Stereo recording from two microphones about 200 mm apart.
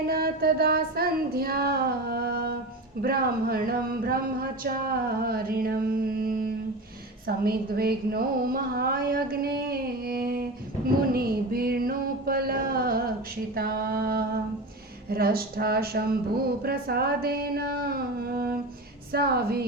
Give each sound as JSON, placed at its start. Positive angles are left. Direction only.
{"t": 0.1, "sound": "speech", "side_deg": -50}
{"t": 11.1, "sound": "a sound", "side_deg": -50}
{"t": 13.6, "sound": "speech", "side_deg": -50}